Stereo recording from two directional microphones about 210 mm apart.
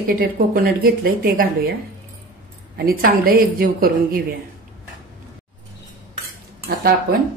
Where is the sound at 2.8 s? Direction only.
45° right (ahead or behind).